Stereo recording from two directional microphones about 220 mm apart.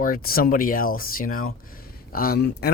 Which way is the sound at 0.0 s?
40° left (ahead or behind).